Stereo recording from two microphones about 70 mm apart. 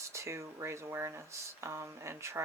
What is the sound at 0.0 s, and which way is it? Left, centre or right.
Speech, right.